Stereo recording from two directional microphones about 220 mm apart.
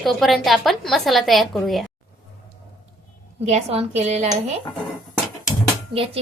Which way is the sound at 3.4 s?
30° right (ahead or behind).